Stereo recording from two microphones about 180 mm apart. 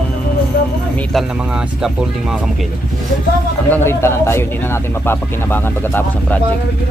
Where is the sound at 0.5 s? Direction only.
65° left (ahead or behind).